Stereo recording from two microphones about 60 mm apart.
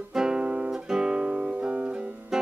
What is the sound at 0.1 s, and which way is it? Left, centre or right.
Guitar, centre.